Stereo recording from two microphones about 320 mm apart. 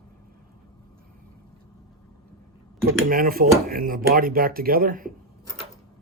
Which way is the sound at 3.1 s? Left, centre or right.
Right.